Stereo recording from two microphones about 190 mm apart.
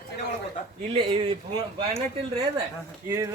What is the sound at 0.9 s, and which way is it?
Speech, 25° right (ahead or behind).